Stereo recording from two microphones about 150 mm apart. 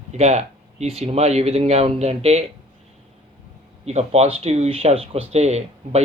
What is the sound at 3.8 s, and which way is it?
Speech, 45° right (ahead or behind).